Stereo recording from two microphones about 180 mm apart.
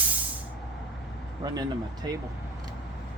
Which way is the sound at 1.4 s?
20° right (ahead or behind).